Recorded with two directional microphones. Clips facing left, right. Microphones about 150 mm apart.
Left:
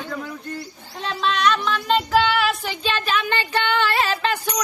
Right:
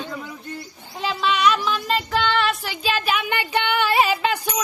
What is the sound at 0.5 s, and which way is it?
A woman's voice, 5° right (ahead or behind).